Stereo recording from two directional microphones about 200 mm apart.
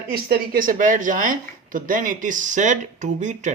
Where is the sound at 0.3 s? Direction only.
45° right (ahead or behind).